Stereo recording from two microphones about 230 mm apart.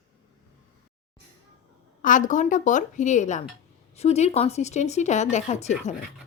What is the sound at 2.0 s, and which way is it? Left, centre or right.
A woman's voice, left.